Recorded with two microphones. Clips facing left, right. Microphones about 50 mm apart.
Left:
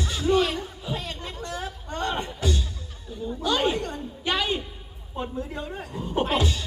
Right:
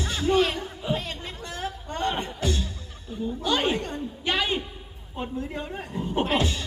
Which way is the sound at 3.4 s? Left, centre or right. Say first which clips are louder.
Left 1 dB; right.